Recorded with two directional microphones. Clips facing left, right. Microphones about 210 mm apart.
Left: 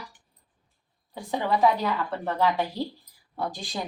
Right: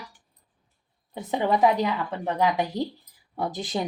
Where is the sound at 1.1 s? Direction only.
20° right (ahead or behind).